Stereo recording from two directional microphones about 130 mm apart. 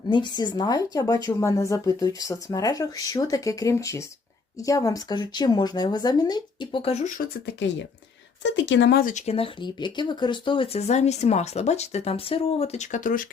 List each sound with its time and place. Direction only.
0.1 s a woman's voice: 35° left (ahead or behind)
6.7 s speech: 45° left (ahead or behind)
9.0 s speech: 90° left
9.2 s speech: 45° left (ahead or behind); by 13.2 s 85° left